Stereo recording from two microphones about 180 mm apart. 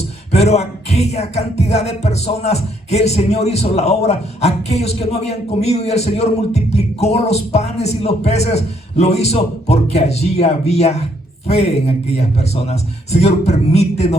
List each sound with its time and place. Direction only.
0.3 s music: 35° left (ahead or behind)